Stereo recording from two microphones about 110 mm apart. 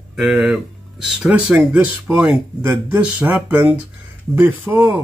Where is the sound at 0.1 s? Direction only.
5° right (ahead or behind).